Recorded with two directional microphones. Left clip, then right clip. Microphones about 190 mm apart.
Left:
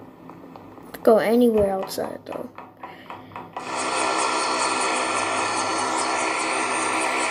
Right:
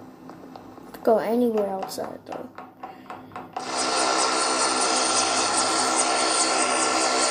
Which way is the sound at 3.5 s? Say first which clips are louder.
Even; 20° right (ahead or behind).